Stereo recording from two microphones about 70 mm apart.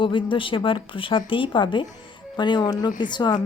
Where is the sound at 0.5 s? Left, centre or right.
Left.